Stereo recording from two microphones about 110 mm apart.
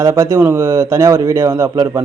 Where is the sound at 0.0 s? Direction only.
30° right (ahead or behind).